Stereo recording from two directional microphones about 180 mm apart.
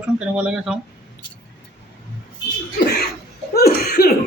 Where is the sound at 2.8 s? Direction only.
65° left (ahead or behind).